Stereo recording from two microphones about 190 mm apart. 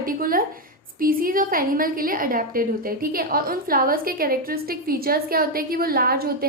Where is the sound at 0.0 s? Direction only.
50° right (ahead or behind).